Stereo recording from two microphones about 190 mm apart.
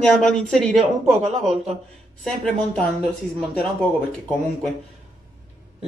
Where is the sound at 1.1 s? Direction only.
35° right (ahead or behind).